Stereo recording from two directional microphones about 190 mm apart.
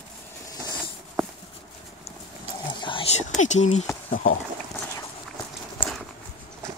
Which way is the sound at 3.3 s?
40° left (ahead or behind).